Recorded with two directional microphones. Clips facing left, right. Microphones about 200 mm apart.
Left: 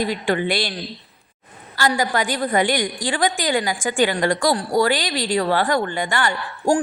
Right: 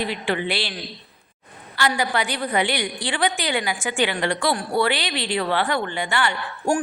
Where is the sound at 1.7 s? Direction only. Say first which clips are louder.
Left 2 dB; 40° left (ahead or behind).